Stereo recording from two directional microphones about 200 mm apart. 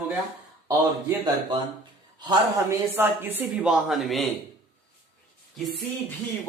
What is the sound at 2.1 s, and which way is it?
Speech, 20° right (ahead or behind).